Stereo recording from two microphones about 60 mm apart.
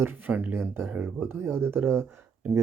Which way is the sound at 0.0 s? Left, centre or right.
Right.